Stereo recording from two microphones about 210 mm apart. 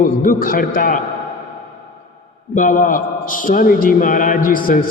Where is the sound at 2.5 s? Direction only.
40° left (ahead or behind).